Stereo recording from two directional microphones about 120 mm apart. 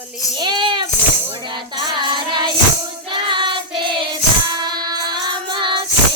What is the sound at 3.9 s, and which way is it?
Child singing, 40° right (ahead or behind).